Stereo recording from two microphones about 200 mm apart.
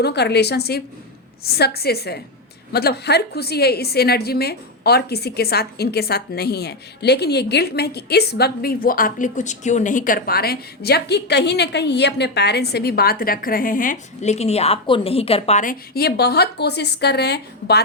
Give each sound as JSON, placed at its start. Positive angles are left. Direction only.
{"t": 0.0, "sound": "a woman's voice", "side_deg": 55}
{"t": 16.0, "sound": "a woman's voice", "side_deg": 55}